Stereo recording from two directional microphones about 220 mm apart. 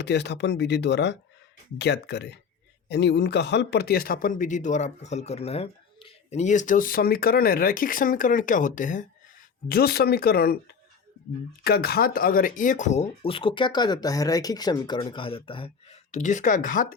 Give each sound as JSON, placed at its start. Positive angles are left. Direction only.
{"t": 0.0, "sound": "a man's voice", "side_deg": 50}